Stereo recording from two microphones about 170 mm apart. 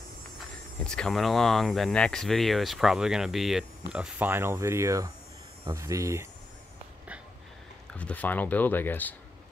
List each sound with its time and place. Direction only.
0.8 s speech: 5° left (ahead or behind); by 6.2 s 20° right (ahead or behind)
7.9 s speech: 10° left (ahead or behind)